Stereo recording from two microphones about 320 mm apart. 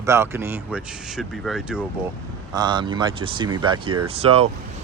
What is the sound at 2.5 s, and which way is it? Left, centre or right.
Speech, centre.